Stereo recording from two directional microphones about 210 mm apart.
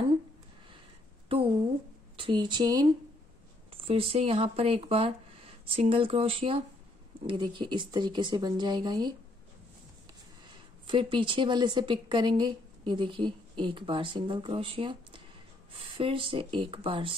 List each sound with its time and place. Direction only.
2.1 s a woman's voice: 25° right (ahead or behind)
10.9 s a woman's voice: 25° right (ahead or behind)